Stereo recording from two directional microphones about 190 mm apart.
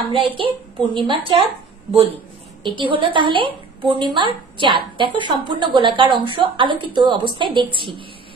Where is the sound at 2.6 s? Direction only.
25° right (ahead or behind).